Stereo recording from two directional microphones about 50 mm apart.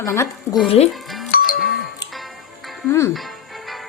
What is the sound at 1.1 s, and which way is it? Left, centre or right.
Music, centre.